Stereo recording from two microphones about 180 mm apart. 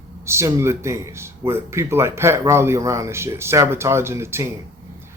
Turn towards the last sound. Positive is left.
turn(degrees=-15)  # may be behind; listen again after turning